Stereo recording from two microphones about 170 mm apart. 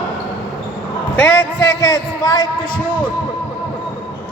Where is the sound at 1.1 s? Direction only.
15° left (ahead or behind).